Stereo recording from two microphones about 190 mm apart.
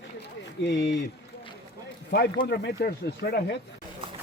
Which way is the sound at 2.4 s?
55° left (ahead or behind).